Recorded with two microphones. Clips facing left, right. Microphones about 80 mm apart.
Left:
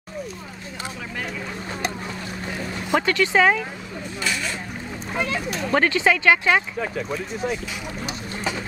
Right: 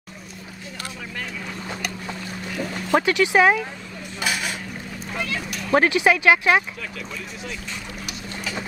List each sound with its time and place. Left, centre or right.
2.9 s speech: centre
4.2 s a sound: centre
5.1 s speech: left
5.7 s speech: centre
6.8 s speech: left